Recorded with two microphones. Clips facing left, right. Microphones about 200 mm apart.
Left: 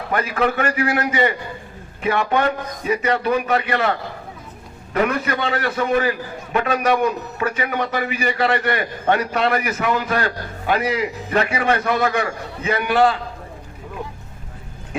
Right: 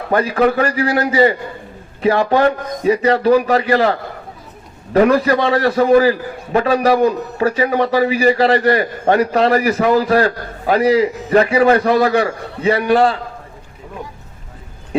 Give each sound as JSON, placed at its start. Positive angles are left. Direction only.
{"t": 0.1, "sound": "a man's voice", "side_deg": -35}
{"t": 4.9, "sound": "a man's voice", "side_deg": -35}